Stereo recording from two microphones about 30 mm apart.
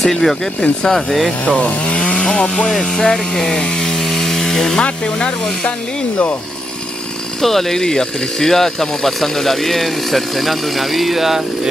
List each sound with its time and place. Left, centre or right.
0.0 s speech: centre
1.4 s speech: left
2.1 s speech: left; by 4.7 s centre
5.0 s speech: left
7.4 s speech: centre
7.8 s speech: left
8.4 s speech: centre